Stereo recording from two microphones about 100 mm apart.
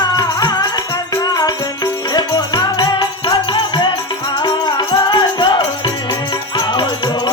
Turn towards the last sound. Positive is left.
turn(degrees=50)  # may be behind; listen again after turning